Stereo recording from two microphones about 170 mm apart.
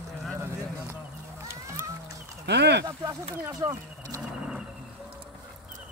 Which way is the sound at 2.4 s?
85° right.